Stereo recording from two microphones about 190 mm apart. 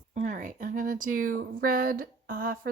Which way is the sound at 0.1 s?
45° right (ahead or behind).